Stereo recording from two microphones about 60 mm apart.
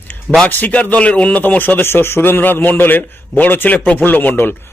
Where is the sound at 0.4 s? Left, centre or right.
Left.